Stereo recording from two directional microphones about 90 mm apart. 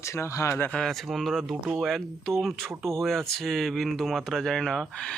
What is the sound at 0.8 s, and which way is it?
Speech, centre (ahead or behind).